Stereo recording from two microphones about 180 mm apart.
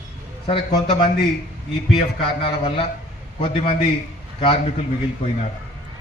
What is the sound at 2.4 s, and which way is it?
Speech, 30° left (ahead or behind).